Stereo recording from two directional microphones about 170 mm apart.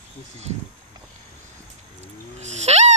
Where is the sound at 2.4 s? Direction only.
40° right (ahead or behind).